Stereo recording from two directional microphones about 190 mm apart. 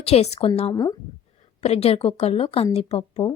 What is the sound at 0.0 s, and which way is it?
Speech, 35° left (ahead or behind).